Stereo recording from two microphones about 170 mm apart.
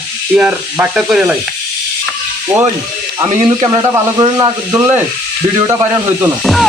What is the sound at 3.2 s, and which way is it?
Speech, 20° right (ahead or behind).